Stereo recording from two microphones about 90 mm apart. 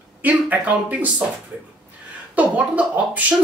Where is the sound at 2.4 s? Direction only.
15° right (ahead or behind).